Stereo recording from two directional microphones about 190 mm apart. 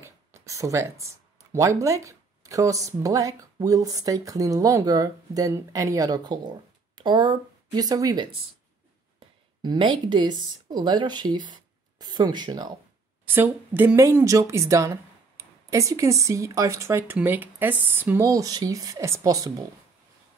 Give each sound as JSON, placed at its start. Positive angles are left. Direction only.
{"t": 0.0, "sound": "speech", "side_deg": -15}
{"t": 9.6, "sound": "speech", "side_deg": -25}
{"t": 13.2, "sound": "speech", "side_deg": -10}